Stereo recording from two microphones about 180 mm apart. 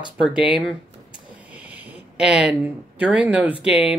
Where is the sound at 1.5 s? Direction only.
10° right (ahead or behind).